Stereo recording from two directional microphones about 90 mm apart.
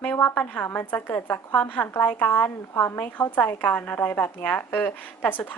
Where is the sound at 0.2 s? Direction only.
20° left (ahead or behind).